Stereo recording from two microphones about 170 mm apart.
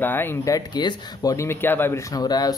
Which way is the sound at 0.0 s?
10° left (ahead or behind).